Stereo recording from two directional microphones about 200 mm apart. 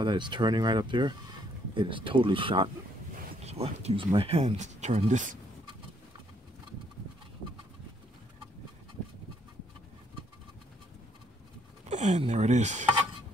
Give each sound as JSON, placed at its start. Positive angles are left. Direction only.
{"t": 0.0, "sound": "speech", "side_deg": -20}
{"t": 11.9, "sound": "speech", "side_deg": -35}